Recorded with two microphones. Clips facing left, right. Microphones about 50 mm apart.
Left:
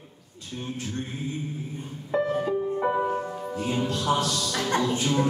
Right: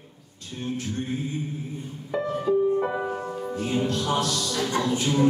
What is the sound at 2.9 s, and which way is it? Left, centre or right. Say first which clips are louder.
Music: left 2 dB; centre.